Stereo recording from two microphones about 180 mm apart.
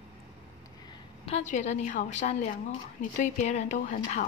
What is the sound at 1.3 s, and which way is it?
Speech, 40° left (ahead or behind).